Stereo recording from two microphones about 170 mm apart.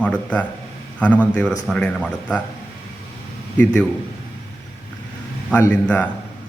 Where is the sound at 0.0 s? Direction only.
10° left (ahead or behind).